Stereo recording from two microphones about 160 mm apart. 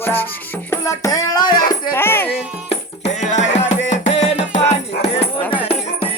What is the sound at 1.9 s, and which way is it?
Music, 15° left (ahead or behind).